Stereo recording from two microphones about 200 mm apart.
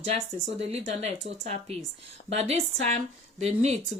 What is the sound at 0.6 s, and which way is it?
Speech, 30° right (ahead or behind).